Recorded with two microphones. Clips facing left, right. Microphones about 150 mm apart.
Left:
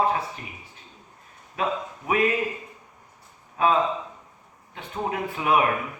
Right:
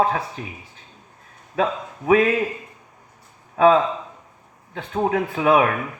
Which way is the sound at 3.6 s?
90° right.